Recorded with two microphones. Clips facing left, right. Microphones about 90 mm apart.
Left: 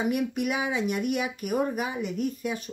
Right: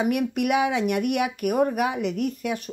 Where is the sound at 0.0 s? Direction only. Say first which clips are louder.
Right 3 dB; 65° right (ahead or behind).